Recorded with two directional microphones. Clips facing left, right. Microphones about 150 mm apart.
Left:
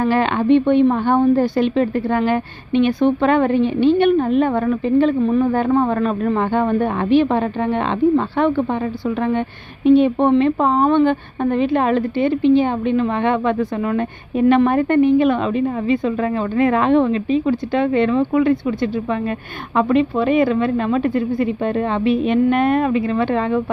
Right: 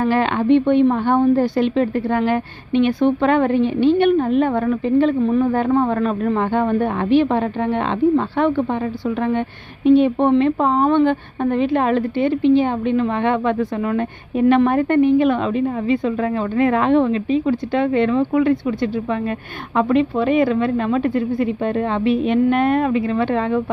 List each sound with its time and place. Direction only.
0.0 s a woman's voice: 30° left (ahead or behind)
10.0 s a woman's voice: 20° left (ahead or behind)